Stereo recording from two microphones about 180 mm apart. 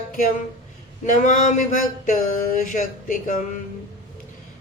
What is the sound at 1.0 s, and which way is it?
Speech, 45° left (ahead or behind).